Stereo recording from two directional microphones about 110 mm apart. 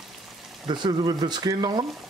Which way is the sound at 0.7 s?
45° right (ahead or behind).